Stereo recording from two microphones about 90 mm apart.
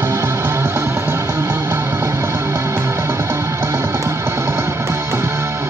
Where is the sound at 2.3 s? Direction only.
35° right (ahead or behind).